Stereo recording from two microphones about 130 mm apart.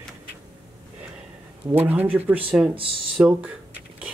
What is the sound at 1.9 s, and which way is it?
Speech, 15° right (ahead or behind).